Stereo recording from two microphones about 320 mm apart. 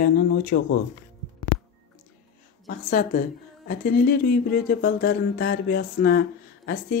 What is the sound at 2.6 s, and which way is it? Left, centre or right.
A woman's voice, left.